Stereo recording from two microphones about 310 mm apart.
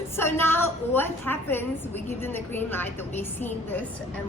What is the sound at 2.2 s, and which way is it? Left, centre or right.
A woman's voice, centre.